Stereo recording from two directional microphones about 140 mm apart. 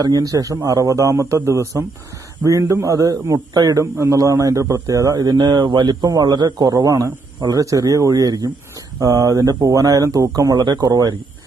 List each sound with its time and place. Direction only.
0.0 s a man's voice: 25° right (ahead or behind)